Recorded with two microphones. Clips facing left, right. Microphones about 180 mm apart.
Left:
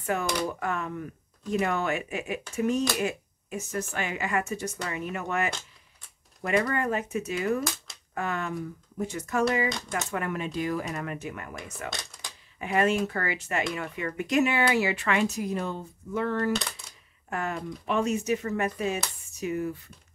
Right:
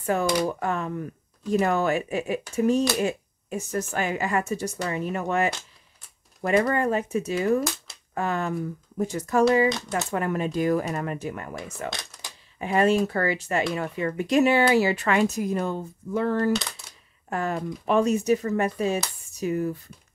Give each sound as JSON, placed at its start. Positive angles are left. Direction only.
{"t": 0.0, "sound": "speech", "side_deg": -30}
{"t": 10.9, "sound": "speech", "side_deg": -35}